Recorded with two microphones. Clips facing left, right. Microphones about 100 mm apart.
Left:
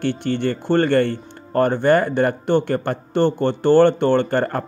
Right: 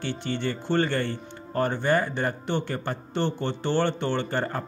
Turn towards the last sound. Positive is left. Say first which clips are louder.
# left 9 dB
turn(degrees=60)  # may be behind; listen again after turning